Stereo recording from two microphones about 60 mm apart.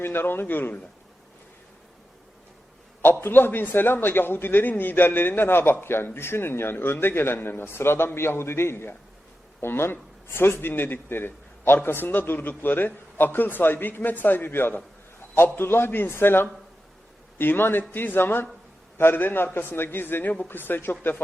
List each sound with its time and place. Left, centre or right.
0.0 s a man's voice: left
3.0 s a man's voice: left